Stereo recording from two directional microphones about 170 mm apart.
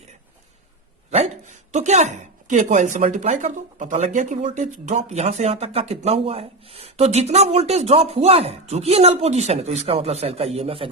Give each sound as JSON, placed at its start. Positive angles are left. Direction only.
{"t": 1.1, "sound": "speech", "side_deg": -45}